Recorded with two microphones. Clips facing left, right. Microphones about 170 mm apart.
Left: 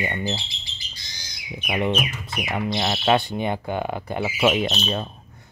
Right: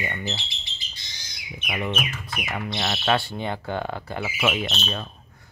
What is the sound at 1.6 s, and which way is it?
Speech, 25° left (ahead or behind).